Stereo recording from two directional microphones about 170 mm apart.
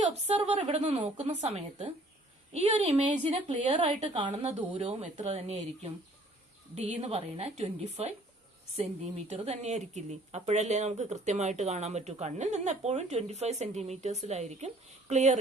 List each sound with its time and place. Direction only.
0.3 s speech: 40° right (ahead or behind)